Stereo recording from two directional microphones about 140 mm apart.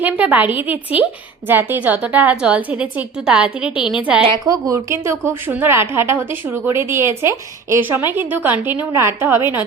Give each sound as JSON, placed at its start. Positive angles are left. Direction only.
{"t": 0.0, "sound": "a woman's voice", "side_deg": -10}
{"t": 4.2, "sound": "a woman's voice", "side_deg": -30}